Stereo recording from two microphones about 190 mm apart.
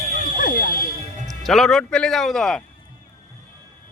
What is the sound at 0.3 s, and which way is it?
Fire alarm, 50° left (ahead or behind).